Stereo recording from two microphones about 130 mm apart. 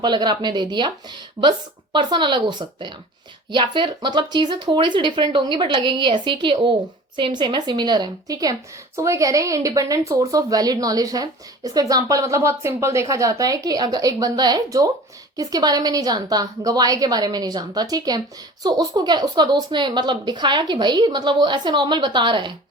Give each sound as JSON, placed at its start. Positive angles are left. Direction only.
{"t": 0.0, "sound": "speech", "side_deg": -35}